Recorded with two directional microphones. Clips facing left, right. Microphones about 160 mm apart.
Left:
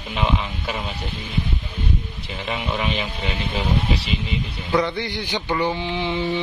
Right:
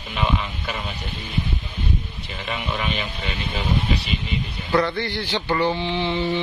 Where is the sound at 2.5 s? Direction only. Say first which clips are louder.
Left 2 dB; 20° left (ahead or behind).